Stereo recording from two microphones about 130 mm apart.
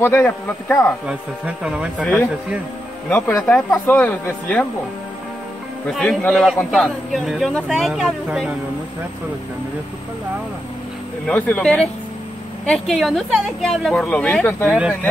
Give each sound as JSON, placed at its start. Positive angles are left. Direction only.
{"t": 0.0, "sound": "speech", "side_deg": 20}
{"t": 1.0, "sound": "speech", "side_deg": -5}
{"t": 3.1, "sound": "speech", "side_deg": 10}
{"t": 5.9, "sound": "a man's voice", "side_deg": 5}
{"t": 11.2, "sound": "speech", "side_deg": 10}